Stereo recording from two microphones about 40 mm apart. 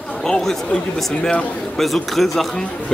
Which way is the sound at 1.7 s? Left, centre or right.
Centre.